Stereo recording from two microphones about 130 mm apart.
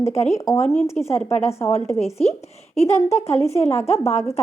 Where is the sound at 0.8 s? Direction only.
20° left (ahead or behind).